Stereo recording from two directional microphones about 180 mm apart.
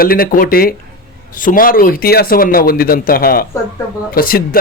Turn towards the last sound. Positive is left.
turn(degrees=55)  # may be behind; listen again after turning